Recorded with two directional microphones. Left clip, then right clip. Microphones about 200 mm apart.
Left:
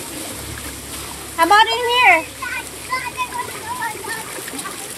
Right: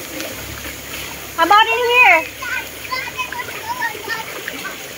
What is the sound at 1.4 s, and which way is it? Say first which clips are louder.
Speech: right 1 dB; 15° right (ahead or behind).